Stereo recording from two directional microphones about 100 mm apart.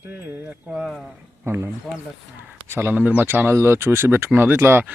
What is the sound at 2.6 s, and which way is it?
Speech, 25° right (ahead or behind).